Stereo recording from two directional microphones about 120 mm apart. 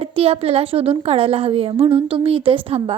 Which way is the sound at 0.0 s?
50° right (ahead or behind).